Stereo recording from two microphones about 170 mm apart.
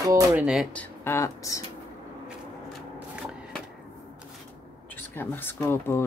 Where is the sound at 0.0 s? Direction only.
20° right (ahead or behind).